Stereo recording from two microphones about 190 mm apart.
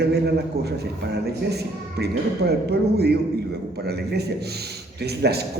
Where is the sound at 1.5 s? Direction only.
60° right (ahead or behind).